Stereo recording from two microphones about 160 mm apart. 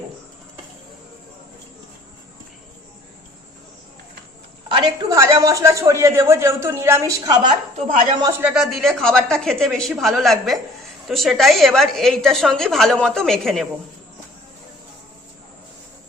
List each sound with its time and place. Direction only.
4.7 s a woman's voice: 30° right (ahead or behind)
8.4 s a woman's voice: 5° right (ahead or behind)